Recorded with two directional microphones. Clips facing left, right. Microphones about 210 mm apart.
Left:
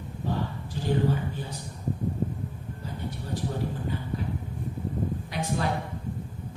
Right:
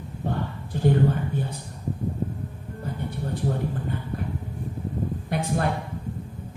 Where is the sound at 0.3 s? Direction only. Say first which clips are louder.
Right 1 dB; 55° right (ahead or behind).